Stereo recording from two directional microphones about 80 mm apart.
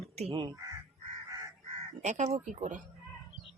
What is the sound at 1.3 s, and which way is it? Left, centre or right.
Crow, right.